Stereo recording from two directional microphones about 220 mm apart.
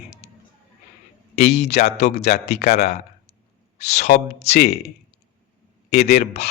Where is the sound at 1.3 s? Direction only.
50° left (ahead or behind).